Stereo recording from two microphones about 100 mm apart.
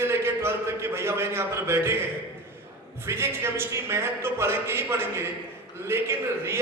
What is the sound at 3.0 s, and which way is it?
A man's voice, 25° right (ahead or behind).